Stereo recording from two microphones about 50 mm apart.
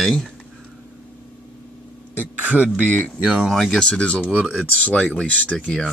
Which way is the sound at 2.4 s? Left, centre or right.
Right.